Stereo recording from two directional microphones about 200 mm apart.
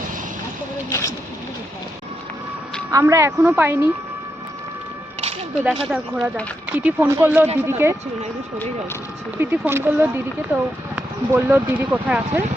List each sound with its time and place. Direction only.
0.9 s a sound: 15° left (ahead or behind)
2.9 s speech: 15° right (ahead or behind)
5.9 s speech: 5° right (ahead or behind)
9.4 s speech: 10° right (ahead or behind)